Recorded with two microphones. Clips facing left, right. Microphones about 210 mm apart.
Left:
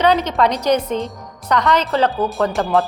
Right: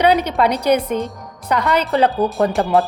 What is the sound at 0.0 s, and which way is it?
A woman's voice, 10° right (ahead or behind).